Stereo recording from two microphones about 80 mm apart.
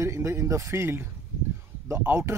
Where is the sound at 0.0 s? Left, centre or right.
Right.